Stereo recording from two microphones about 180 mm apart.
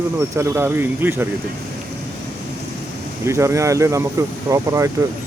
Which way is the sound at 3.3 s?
15° right (ahead or behind).